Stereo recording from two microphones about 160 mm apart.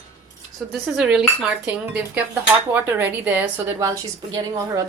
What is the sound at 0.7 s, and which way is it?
A woman's voice, 5° right (ahead or behind).